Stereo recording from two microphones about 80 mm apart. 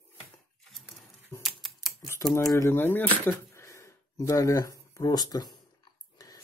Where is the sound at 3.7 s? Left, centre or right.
Left.